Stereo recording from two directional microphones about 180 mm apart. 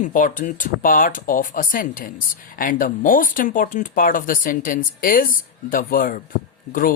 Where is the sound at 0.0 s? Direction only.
50° left (ahead or behind).